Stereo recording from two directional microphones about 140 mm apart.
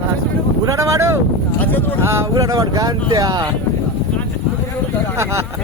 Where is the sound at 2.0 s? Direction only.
20° right (ahead or behind).